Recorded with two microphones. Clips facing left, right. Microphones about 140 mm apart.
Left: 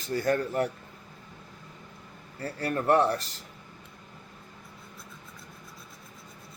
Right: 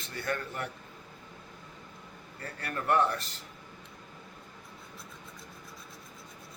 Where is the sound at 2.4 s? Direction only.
30° left (ahead or behind).